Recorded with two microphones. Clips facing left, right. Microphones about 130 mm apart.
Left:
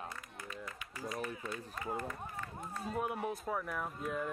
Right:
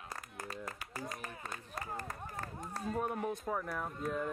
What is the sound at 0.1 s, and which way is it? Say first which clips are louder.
Run: right 2 dB; 40° right (ahead or behind).